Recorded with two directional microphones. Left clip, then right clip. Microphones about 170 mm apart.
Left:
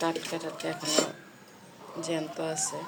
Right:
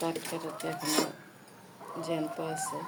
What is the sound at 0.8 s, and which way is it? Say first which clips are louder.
Cutlery: left 3 dB; 30° right (ahead or behind).